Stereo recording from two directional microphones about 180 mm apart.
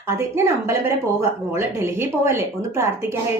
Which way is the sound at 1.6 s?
15° right (ahead or behind).